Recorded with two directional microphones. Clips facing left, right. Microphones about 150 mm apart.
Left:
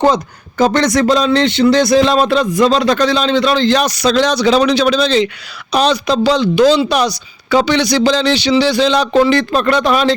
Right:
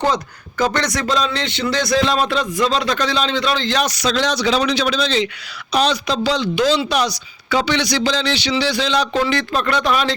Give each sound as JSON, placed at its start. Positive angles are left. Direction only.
{"t": 0.1, "sound": "a man's voice", "side_deg": 25}
{"t": 5.7, "sound": "a man's voice", "side_deg": 60}
{"t": 6.2, "sound": "a man's voice", "side_deg": 40}
{"t": 7.9, "sound": "a man's voice", "side_deg": 40}